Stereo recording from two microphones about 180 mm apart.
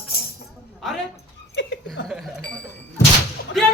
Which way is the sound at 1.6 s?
90° left.